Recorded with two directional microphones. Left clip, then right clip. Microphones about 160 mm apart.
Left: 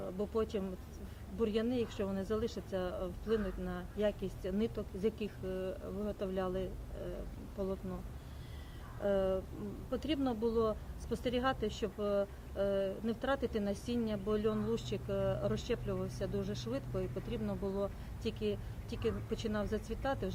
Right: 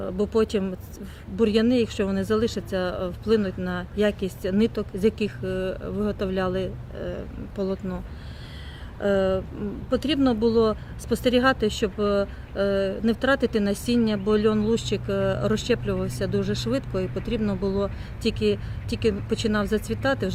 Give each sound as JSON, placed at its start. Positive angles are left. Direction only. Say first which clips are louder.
{"t": 0.0, "sound": "speech", "louder": "right 13 dB", "side_deg": -30}
{"t": 9.0, "sound": "speech", "louder": "right 11 dB", "side_deg": -35}